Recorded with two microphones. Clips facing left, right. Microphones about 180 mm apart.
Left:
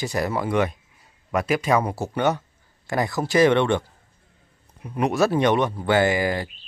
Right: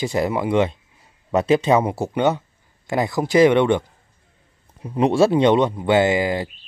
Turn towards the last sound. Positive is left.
turn(degrees=-20)  # may be behind; listen again after turning